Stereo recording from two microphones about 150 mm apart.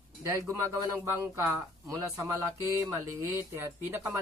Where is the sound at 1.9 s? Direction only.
25° right (ahead or behind).